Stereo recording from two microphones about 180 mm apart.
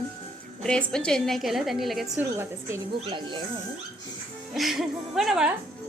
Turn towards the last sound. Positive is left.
turn(degrees=0)  # may be behind; listen again after turning